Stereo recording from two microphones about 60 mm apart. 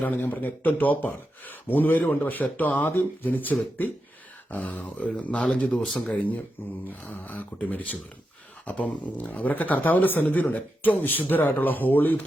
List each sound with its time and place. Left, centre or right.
0.0 s speech: left
4.7 s speech: left
5.8 s speech: centre
6.6 s speech: left